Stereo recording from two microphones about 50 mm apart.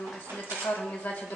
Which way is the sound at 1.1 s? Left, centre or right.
Left.